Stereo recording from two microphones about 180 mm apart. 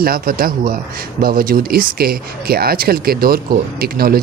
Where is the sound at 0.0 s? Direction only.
55° right (ahead or behind).